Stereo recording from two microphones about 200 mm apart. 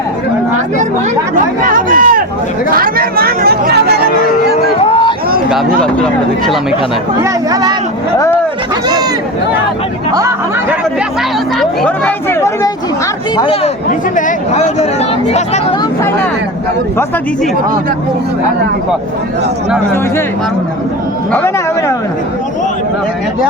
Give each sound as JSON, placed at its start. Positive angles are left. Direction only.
{"t": 1.6, "sound": "a sound", "side_deg": -45}
{"t": 2.6, "sound": "speech", "side_deg": -45}
{"t": 4.8, "sound": "a sound", "side_deg": 25}
{"t": 5.8, "sound": "speech", "side_deg": 5}
{"t": 7.2, "sound": "speech", "side_deg": -20}
{"t": 10.2, "sound": "speech", "side_deg": -15}
{"t": 11.6, "sound": "speech", "side_deg": 5}
{"t": 13.3, "sound": "speech", "side_deg": 25}
{"t": 14.2, "sound": "speech", "side_deg": 35}
{"t": 21.3, "sound": "speech", "side_deg": 10}